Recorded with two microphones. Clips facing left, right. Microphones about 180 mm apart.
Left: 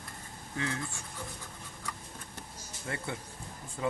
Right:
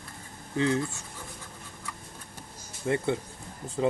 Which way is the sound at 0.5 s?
30° right (ahead or behind).